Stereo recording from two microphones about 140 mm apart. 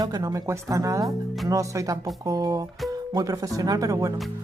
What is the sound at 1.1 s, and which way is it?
Speech, centre (ahead or behind).